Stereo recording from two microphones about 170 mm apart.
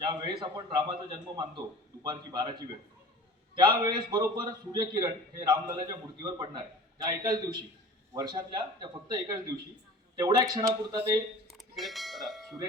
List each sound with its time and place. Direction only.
0.0 s a man's voice: 25° right (ahead or behind)
10.5 s a man's voice: 20° right (ahead or behind)
11.5 s bell: centre (ahead or behind)